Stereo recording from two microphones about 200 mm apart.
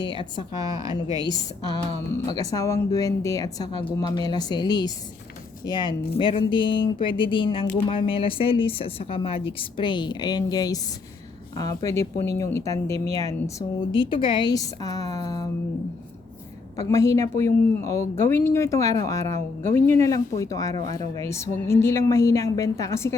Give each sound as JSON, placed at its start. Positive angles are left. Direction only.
{"t": 0.0, "sound": "a woman's voice", "side_deg": 25}
{"t": 0.5, "sound": "a woman's voice", "side_deg": -15}
{"t": 2.2, "sound": "a woman's voice", "side_deg": 20}
{"t": 16.7, "sound": "speech", "side_deg": 15}